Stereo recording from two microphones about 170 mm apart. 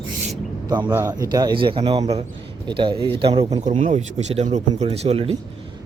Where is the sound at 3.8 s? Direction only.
45° right (ahead or behind).